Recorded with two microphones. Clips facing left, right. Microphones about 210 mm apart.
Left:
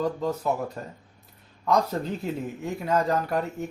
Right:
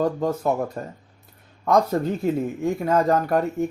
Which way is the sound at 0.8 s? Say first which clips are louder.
Right 5 dB; 50° right (ahead or behind).